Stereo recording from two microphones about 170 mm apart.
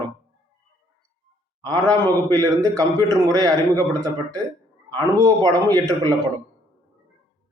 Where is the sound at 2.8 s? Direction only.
20° right (ahead or behind).